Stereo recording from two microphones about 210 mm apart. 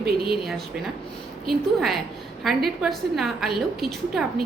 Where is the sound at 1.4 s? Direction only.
Centre (ahead or behind).